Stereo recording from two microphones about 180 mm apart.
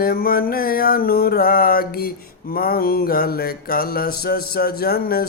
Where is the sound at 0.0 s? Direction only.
55° left (ahead or behind).